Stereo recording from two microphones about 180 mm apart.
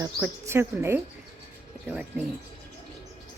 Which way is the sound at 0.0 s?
15° right (ahead or behind).